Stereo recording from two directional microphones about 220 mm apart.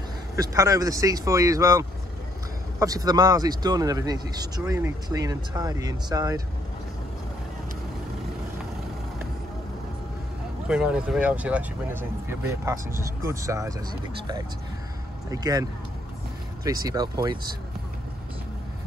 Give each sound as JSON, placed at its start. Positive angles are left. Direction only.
{"t": 0.4, "sound": "speech", "side_deg": -15}
{"t": 10.7, "sound": "speech", "side_deg": -5}